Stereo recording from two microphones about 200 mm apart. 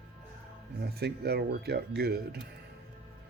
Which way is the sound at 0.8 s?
55° right (ahead or behind).